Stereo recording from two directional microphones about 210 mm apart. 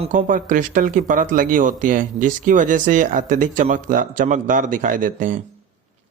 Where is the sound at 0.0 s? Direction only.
35° right (ahead or behind).